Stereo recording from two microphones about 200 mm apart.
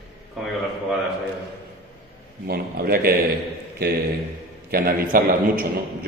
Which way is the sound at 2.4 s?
50° right (ahead or behind).